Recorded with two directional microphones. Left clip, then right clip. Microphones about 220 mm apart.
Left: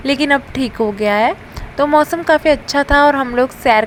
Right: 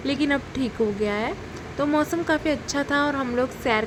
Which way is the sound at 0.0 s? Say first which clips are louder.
Left 10 dB; 25° left (ahead or behind).